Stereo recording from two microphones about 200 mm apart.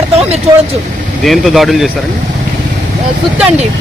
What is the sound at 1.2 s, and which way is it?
Speech, centre (ahead or behind).